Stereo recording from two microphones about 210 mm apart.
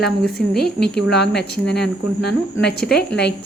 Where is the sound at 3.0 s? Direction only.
50° left (ahead or behind).